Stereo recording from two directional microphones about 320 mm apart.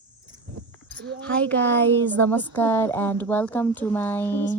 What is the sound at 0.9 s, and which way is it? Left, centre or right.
Speech, right.